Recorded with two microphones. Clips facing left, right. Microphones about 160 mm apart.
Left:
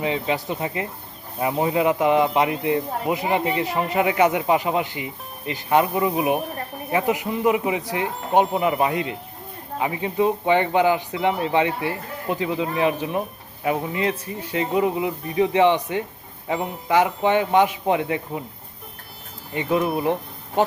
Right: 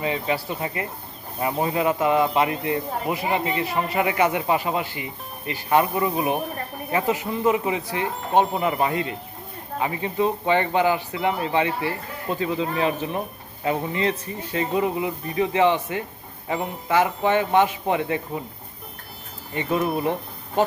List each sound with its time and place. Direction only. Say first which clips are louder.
0.0 s speech: left 1 dB; 20° left (ahead or behind)
8.4 s speech: left 2 dB; centre (ahead or behind)
8.8 s speech: left 1 dB; 20° left (ahead or behind)
19.6 s speech: left 2 dB; centre (ahead or behind)